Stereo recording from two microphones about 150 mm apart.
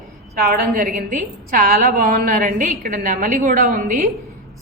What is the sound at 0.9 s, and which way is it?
A woman's voice, 65° right (ahead or behind).